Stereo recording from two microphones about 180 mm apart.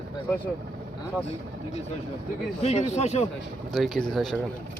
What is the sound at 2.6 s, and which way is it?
Speech, 35° left (ahead or behind).